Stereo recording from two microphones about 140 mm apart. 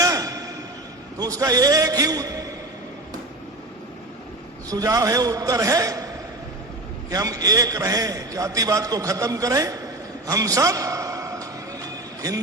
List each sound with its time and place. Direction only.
0.0 s a sound: 25° right (ahead or behind)
1.2 s a man's voice: 25° right (ahead or behind)
4.7 s a man's voice: 25° right (ahead or behind)
7.1 s a man's voice: 25° right (ahead or behind)